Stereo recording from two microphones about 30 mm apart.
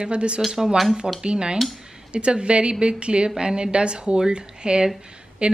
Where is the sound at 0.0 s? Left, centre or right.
Right.